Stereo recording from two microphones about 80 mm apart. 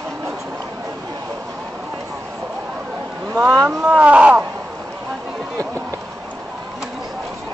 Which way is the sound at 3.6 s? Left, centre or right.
Centre.